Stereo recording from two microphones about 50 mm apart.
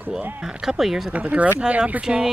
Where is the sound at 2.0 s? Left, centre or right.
Centre.